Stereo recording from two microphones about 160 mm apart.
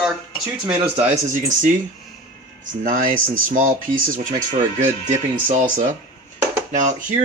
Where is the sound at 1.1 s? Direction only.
50° right (ahead or behind).